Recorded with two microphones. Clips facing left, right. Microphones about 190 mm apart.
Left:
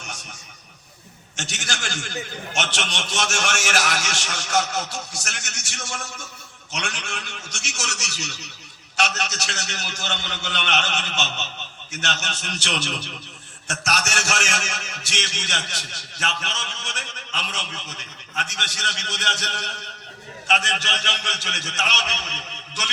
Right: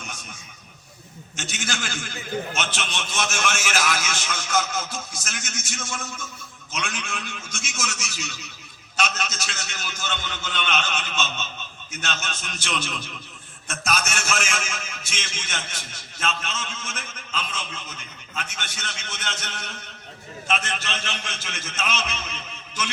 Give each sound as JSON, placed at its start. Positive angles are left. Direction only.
{"t": 1.7, "sound": "a man's voice", "side_deg": 75}